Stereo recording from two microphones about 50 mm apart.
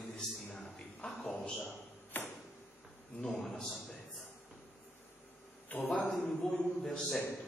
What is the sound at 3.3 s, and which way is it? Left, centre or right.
Speech, centre.